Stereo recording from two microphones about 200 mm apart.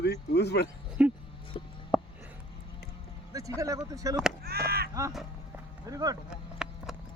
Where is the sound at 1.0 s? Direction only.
5° right (ahead or behind).